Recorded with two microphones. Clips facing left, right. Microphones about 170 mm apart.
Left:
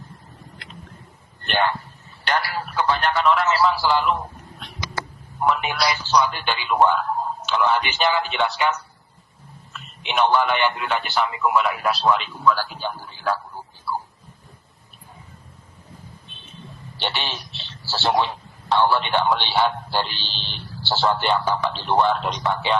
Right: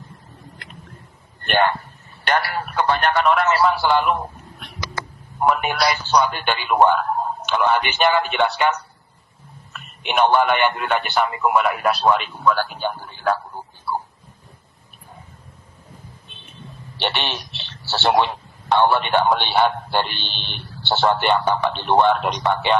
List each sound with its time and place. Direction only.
1.4 s a sound: 55° right (ahead or behind)
2.2 s a man's voice: 55° right (ahead or behind)
5.4 s a man's voice: 50° right (ahead or behind)
17.0 s a man's voice: 65° right (ahead or behind)